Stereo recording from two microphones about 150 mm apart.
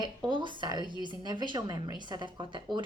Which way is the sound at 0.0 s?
30° right (ahead or behind).